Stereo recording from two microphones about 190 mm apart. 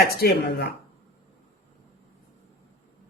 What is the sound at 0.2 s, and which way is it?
Speech, 60° left (ahead or behind).